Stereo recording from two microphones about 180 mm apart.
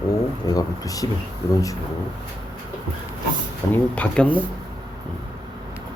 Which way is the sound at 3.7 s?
5° left (ahead or behind).